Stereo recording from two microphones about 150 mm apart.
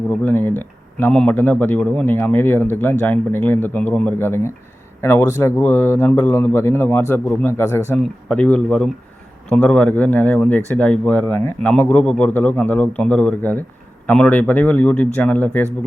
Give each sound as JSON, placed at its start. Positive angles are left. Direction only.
{"t": 0.1, "sound": "a man's voice", "side_deg": 10}